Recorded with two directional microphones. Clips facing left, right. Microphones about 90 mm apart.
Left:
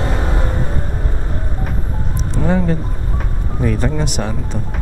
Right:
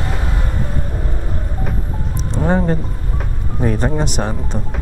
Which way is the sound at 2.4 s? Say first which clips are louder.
Right 1 dB; 35° right (ahead or behind).